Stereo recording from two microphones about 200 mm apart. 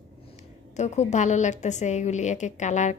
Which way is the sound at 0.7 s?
35° left (ahead or behind).